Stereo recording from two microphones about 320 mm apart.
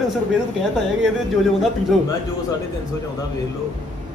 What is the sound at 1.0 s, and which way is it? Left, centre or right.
Speech, centre.